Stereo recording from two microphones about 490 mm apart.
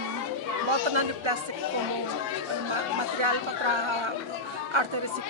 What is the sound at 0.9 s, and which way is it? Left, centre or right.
Speech, right.